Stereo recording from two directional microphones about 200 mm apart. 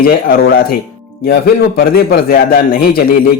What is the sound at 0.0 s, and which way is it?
A man's voice, 50° left (ahead or behind).